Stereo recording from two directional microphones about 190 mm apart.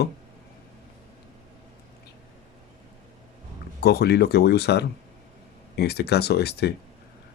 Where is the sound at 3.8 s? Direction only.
60° left (ahead or behind).